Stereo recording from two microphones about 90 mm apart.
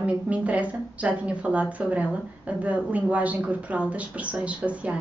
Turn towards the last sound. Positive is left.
turn(degrees=-15)  # may be behind; listen again after turning